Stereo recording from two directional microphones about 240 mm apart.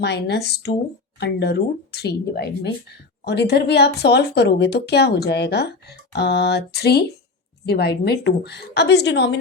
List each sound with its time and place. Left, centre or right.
0.0 s speech: left